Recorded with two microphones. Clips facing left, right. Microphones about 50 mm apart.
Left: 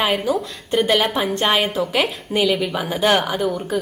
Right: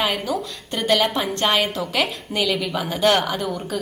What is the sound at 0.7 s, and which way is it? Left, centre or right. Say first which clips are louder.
A woman's voice: left 2 dB; centre.